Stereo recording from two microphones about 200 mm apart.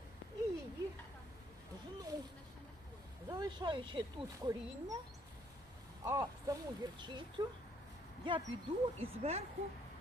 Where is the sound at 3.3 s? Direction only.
20° right (ahead or behind).